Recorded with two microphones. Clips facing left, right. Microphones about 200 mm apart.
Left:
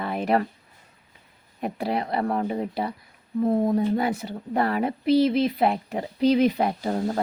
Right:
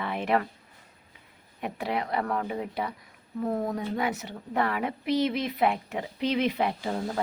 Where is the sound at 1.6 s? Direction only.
35° left (ahead or behind).